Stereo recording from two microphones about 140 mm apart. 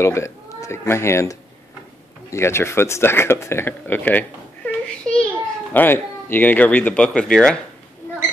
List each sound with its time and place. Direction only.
0.0 s a child's voice: 20° left (ahead or behind)